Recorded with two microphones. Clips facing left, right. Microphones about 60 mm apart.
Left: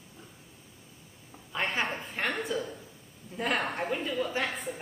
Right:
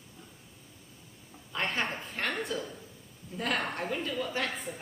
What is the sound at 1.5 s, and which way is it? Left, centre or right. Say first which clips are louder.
A woman's voice: left 1 dB; centre.